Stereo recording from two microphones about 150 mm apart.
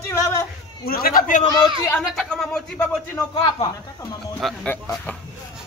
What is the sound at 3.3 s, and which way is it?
Speech, 35° left (ahead or behind).